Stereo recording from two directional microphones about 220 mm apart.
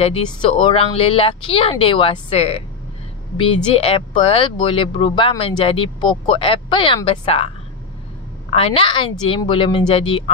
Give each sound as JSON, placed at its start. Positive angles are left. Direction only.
{"t": 0.0, "sound": "speech", "side_deg": 25}
{"t": 8.5, "sound": "speech", "side_deg": 25}